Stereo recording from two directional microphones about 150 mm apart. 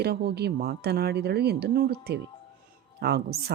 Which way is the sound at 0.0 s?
90° right.